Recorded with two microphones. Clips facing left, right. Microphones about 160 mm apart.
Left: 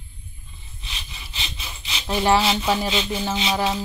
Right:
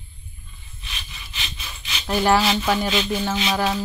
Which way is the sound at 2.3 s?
25° left (ahead or behind).